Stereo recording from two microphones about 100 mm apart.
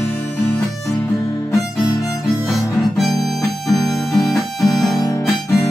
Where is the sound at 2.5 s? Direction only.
Centre (ahead or behind).